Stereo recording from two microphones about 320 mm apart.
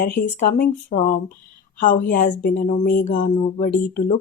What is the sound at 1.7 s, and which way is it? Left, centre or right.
Speech, left.